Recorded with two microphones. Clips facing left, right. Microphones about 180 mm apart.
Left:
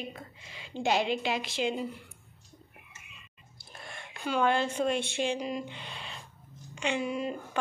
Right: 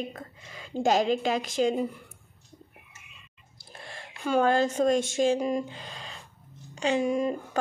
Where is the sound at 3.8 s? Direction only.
30° right (ahead or behind).